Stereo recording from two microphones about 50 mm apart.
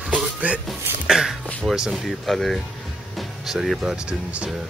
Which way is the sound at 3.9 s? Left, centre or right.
Centre.